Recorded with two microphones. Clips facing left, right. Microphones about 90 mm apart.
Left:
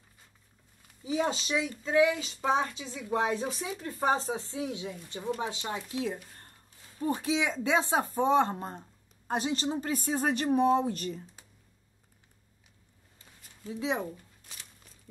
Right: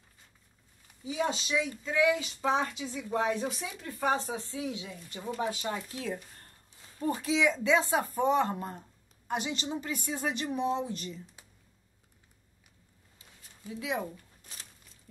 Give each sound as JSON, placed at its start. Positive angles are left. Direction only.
{"t": 1.0, "sound": "a woman's voice", "side_deg": 35}
{"t": 13.7, "sound": "a woman's voice", "side_deg": 30}